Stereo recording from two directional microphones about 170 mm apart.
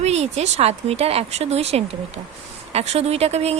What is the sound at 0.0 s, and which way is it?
Speech, 40° right (ahead or behind).